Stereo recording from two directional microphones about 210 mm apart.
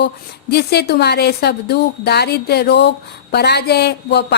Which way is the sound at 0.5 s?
50° left (ahead or behind).